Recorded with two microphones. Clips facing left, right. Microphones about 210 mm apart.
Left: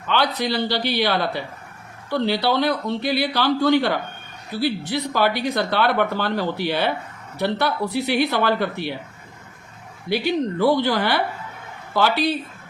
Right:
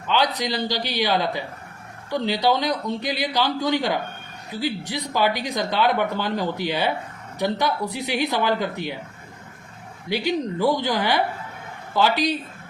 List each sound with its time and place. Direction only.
0.3 s speech: 15° right (ahead or behind)
10.1 s speech: 15° right (ahead or behind)